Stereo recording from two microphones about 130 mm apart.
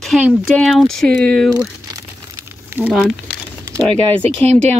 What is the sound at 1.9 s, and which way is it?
Crumpling, 25° right (ahead or behind).